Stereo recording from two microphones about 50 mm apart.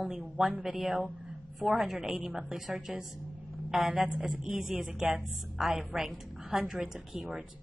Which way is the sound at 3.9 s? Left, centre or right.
Right.